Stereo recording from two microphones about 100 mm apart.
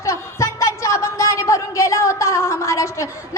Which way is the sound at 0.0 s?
30° left (ahead or behind).